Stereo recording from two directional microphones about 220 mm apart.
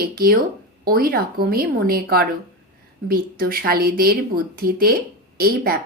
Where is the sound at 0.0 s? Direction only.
45° right (ahead or behind).